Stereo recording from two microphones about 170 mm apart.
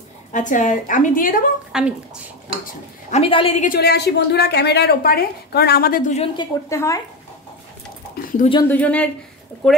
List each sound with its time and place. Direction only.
0.3 s a woman's voice: 50° left (ahead or behind)
1.7 s speech: 5° right (ahead or behind)
3.1 s a woman's voice: 35° left (ahead or behind)
3.6 s a woman's voice: 65° left (ahead or behind)
6.1 s a woman's voice: 30° left (ahead or behind)
8.6 s speech: 10° left (ahead or behind)